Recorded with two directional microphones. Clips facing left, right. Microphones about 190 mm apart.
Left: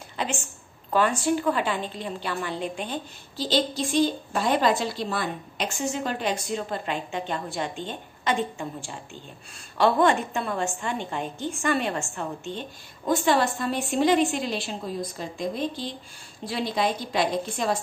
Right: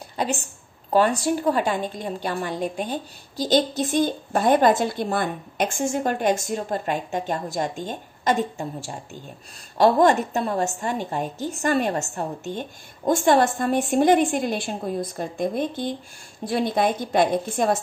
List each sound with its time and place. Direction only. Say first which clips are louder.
0.2 s a woman's voice: right 4 dB; 35° right (ahead or behind)
3.4 s a woman's voice: right 4 dB; 45° right (ahead or behind)